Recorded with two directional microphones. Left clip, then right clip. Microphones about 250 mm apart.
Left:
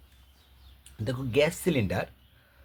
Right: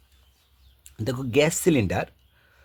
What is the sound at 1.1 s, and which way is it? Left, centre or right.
Speech, right.